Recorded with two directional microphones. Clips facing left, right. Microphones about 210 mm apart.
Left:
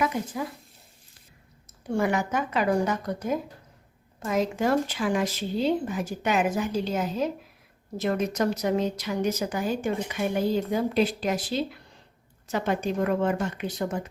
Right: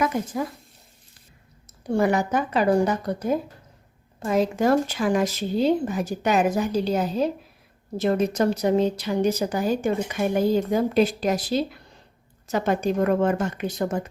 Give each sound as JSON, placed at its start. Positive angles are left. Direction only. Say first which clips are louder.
{"t": 0.0, "sound": "speech", "louder": "right 3 dB", "side_deg": -45}
{"t": 1.9, "sound": "a woman's voice", "louder": "right 4 dB", "side_deg": -35}